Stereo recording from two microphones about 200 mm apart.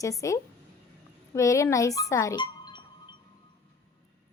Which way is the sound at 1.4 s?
15° left (ahead or behind).